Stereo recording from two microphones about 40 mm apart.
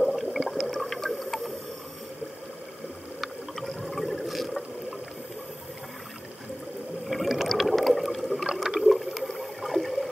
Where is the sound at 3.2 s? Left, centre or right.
Centre.